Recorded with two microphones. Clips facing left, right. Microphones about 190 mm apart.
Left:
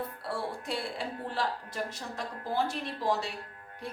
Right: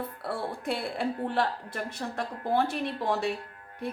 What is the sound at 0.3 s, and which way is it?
Speech, 55° right (ahead or behind).